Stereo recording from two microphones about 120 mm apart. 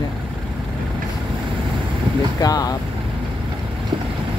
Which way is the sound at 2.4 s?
30° left (ahead or behind).